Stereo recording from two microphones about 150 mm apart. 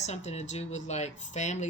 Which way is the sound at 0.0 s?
50° left (ahead or behind).